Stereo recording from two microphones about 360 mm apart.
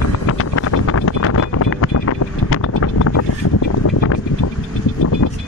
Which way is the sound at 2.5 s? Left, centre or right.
Left.